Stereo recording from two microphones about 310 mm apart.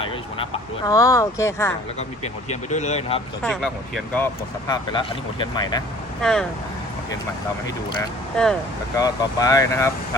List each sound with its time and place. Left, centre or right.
0.0 s speech: centre
2.2 s speech: left
3.4 s speech: centre
4.7 s speech: centre
6.2 s speech: centre
9.0 s speech: centre